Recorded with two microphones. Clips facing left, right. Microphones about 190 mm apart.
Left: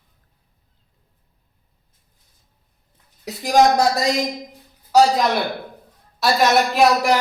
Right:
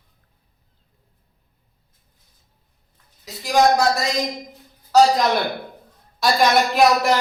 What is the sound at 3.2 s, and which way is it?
Speech, 50° left (ahead or behind).